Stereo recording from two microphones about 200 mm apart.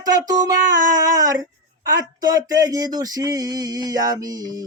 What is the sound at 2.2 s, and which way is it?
Speech, 20° right (ahead or behind).